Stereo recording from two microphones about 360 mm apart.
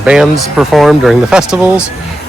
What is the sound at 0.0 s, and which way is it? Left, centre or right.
Speech, centre.